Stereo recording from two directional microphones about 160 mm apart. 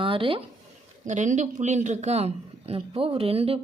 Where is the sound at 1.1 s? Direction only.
50° right (ahead or behind).